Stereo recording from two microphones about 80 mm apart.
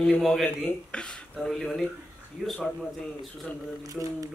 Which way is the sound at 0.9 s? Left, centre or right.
Centre.